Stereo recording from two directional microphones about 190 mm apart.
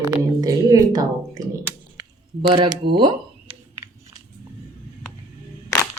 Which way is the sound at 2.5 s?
25° right (ahead or behind).